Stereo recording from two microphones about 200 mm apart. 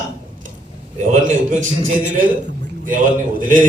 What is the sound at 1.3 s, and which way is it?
Speech, 40° right (ahead or behind).